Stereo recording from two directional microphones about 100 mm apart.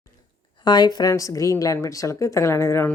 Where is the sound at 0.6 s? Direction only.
45° left (ahead or behind).